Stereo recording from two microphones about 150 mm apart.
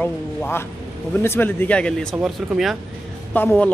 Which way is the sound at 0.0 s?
15° left (ahead or behind).